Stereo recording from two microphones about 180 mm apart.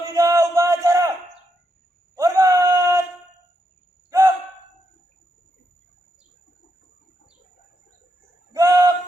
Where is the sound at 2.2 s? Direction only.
15° right (ahead or behind).